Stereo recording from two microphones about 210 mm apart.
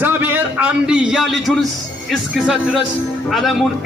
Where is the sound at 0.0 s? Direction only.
10° right (ahead or behind).